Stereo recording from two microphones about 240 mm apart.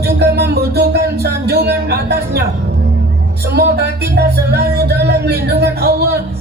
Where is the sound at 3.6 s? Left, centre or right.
Right.